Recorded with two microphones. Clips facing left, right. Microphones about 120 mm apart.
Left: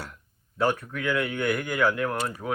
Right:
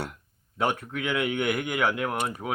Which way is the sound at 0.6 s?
20° right (ahead or behind).